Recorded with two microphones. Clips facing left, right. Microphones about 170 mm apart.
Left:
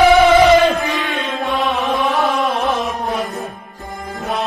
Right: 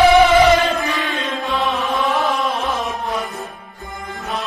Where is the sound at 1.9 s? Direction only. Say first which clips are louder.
Left 1 dB; 20° left (ahead or behind).